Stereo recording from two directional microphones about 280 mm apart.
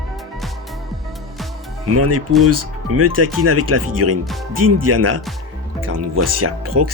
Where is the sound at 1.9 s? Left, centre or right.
Right.